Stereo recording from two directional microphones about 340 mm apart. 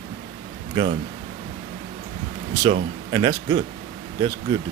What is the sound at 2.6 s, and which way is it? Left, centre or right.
A man's voice, centre.